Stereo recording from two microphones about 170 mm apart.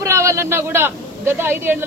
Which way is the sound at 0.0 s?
15° right (ahead or behind).